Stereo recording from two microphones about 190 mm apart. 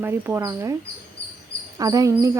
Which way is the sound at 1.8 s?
20° right (ahead or behind).